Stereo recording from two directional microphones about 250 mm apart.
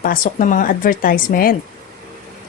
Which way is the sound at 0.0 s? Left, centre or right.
Left.